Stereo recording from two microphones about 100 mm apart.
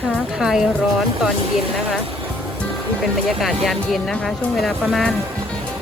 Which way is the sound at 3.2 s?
Centre (ahead or behind).